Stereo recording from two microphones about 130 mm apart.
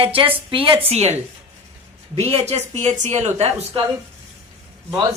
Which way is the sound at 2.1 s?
50° right (ahead or behind).